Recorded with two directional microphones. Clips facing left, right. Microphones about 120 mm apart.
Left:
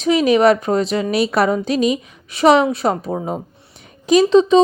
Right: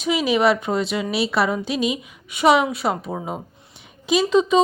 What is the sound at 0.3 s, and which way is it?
A woman's voice, 40° left (ahead or behind).